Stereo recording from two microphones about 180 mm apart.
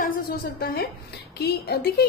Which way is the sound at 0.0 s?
55° left (ahead or behind).